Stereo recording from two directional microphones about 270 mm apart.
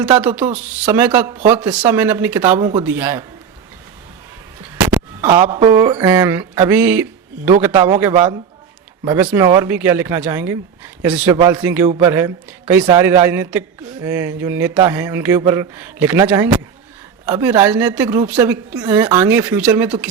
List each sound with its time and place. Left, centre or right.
0.2 s a man's voice: centre
1.5 s a man's voice: centre
4.8 s a sound: centre
5.2 s a man's voice: centre
11.9 s speech: right
12.1 s a man's voice: centre